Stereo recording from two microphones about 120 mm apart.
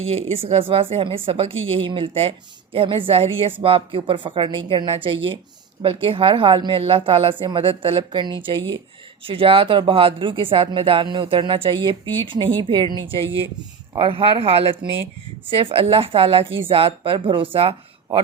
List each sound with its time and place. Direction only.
0.0 s a woman's voice: 55° right (ahead or behind)